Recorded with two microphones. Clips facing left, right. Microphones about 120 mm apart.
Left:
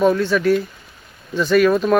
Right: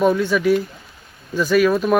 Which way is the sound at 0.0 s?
10° right (ahead or behind).